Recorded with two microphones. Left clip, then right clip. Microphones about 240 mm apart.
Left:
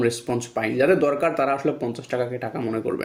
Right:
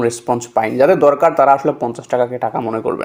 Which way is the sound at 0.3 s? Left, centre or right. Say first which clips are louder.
Right 8 dB; centre.